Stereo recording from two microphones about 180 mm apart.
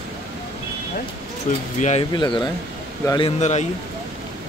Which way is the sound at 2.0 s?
25° left (ahead or behind).